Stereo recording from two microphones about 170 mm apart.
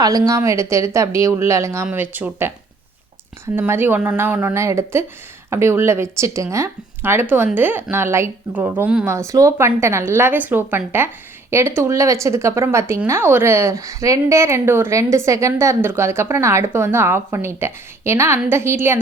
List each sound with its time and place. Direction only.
0.0 s speech: 20° right (ahead or behind)